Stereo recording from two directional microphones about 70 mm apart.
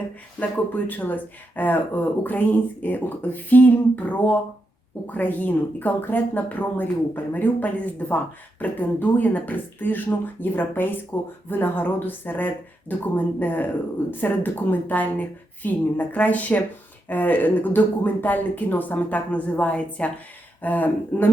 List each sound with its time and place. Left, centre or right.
0.3 s speech: left